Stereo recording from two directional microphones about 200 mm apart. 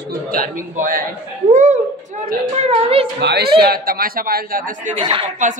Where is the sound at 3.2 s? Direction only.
55° right (ahead or behind).